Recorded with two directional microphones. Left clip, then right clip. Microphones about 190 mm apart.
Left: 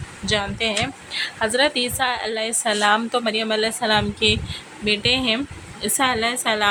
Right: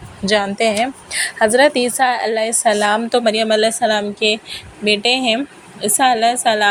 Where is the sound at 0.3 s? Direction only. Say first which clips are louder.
Right 7 dB; 25° right (ahead or behind).